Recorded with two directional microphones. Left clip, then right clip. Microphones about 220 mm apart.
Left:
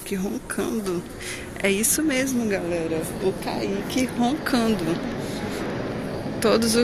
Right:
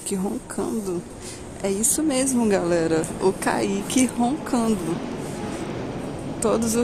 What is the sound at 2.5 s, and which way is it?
A woman's voice, 25° right (ahead or behind).